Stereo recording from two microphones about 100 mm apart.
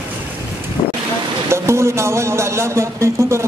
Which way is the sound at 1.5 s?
30° right (ahead or behind).